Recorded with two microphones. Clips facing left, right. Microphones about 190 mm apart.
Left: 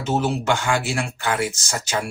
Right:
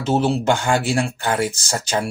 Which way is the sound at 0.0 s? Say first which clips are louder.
Right 4 dB; 30° right (ahead or behind).